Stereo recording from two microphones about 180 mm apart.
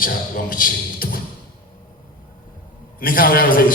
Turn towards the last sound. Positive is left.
turn(degrees=50)  # may be behind; listen again after turning